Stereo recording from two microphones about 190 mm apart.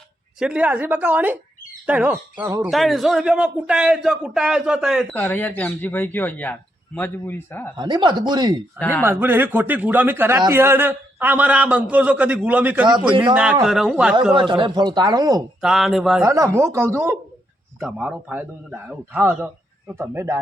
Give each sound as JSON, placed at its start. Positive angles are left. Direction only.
{"t": 0.3, "sound": "a man's voice", "side_deg": -5}
{"t": 2.6, "sound": "a man's voice", "side_deg": 0}
{"t": 5.1, "sound": "speech", "side_deg": 10}
{"t": 7.8, "sound": "speech", "side_deg": -25}
{"t": 8.8, "sound": "speech", "side_deg": 10}
{"t": 9.0, "sound": "a man's voice", "side_deg": -10}
{"t": 14.3, "sound": "speech", "side_deg": -25}
{"t": 15.6, "sound": "a man's voice", "side_deg": 0}
{"t": 16.2, "sound": "a man's voice", "side_deg": -15}